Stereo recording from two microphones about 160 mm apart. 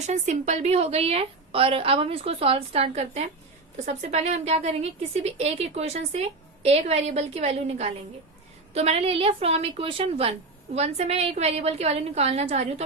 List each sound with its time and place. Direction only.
0.0 s a woman's voice: 45° right (ahead or behind)